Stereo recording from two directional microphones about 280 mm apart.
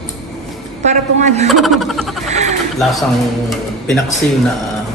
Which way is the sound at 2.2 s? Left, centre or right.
Right.